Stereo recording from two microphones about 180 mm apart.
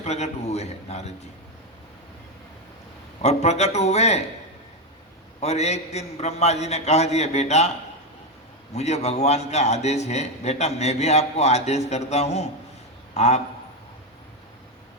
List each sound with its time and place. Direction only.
0.0 s a man's voice: 40° left (ahead or behind)
3.2 s a man's voice: 35° left (ahead or behind)
5.4 s a man's voice: 35° left (ahead or behind)
8.7 s a man's voice: 35° left (ahead or behind)